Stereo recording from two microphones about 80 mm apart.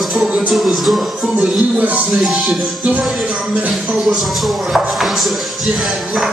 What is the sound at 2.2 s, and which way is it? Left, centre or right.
Music, centre.